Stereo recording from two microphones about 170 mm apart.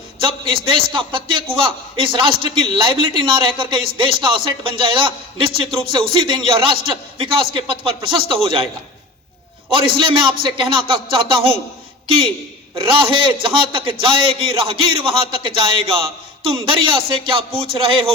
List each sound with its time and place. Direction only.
0.3 s a man's voice: 30° right (ahead or behind)
10.1 s speech: 30° right (ahead or behind)
12.7 s a man's voice: 30° right (ahead or behind)